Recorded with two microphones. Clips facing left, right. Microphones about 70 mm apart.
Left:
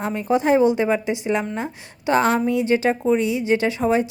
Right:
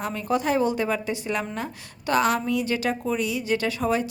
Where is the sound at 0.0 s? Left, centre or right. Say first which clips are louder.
Left 5 dB; left.